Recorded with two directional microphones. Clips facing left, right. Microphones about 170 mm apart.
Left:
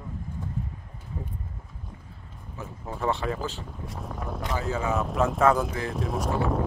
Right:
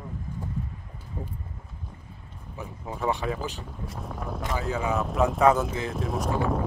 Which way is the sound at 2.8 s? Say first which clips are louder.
Even; 10° right (ahead or behind).